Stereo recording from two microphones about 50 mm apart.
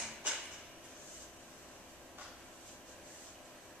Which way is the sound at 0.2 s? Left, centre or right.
Right.